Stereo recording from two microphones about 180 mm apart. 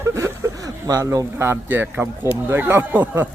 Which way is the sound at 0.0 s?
15° right (ahead or behind).